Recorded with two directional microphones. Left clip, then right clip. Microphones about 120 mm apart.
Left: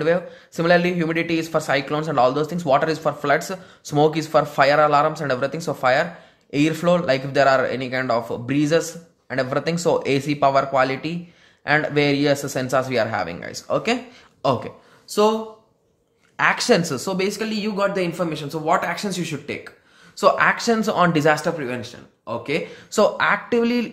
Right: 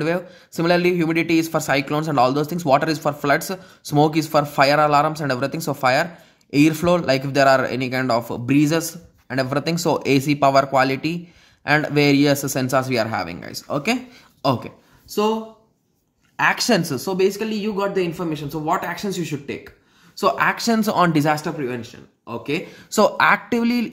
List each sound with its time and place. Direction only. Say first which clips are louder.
0.0 s speech: left 3 dB; 45° right (ahead or behind)
15.0 s speech: left 3 dB; 15° right (ahead or behind)
16.3 s speech: left 1 dB; 30° right (ahead or behind); by 19.7 s 15° right (ahead or behind)
20.2 s speech: left 2 dB; 30° right (ahead or behind)
20.5 s speech: even; 50° right (ahead or behind); by 21.5 s 35° right (ahead or behind)
21.5 s speech: left 2 dB; 15° right (ahead or behind)
22.8 s speech: right 2 dB; 60° right (ahead or behind)
23.6 s speech: left 1 dB; 40° right (ahead or behind)